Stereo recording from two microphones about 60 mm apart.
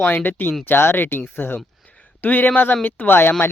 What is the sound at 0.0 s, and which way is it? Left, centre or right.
Speech, left.